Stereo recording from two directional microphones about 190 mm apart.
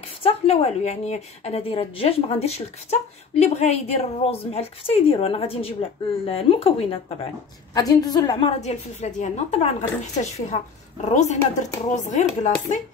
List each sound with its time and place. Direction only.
0.2 s a woman's voice: 30° left (ahead or behind)
7.7 s a woman's voice: 20° left (ahead or behind); by 12.5 s 40° left (ahead or behind)